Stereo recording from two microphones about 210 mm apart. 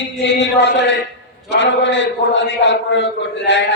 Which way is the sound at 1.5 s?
60° left (ahead or behind).